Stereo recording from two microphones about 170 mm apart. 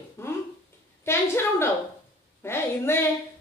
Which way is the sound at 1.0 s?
15° left (ahead or behind).